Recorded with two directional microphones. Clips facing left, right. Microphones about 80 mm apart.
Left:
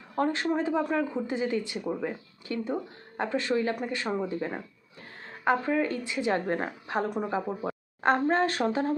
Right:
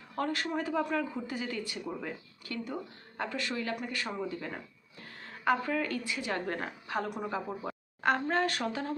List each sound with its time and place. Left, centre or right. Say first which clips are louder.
0.2 s a woman's voice: left 6 dB; left
7.4 s speech: left 5 dB; centre
8.0 s speech: left 5 dB; left